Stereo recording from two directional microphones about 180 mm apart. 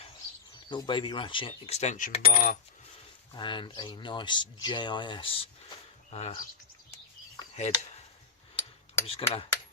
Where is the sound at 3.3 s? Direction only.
25° left (ahead or behind).